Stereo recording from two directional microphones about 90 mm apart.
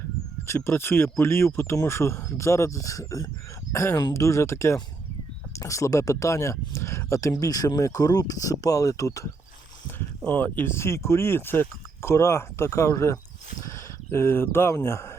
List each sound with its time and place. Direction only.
0.4 s speech: 30° left (ahead or behind)
9.8 s speech: 20° left (ahead or behind)